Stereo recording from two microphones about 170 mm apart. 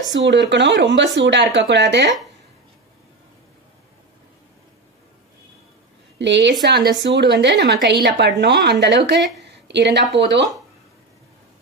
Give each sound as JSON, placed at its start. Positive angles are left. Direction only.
{"t": 0.1, "sound": "speech", "side_deg": -90}
{"t": 6.1, "sound": "a woman's voice", "side_deg": -90}